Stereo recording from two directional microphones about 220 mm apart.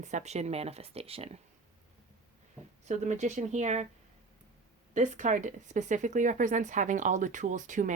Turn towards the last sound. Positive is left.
turn(degrees=-35)  # may be behind; listen again after turning